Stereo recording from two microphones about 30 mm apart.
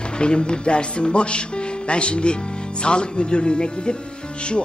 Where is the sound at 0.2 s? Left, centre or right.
Left.